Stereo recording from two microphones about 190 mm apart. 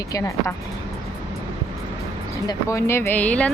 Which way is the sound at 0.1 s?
15° left (ahead or behind).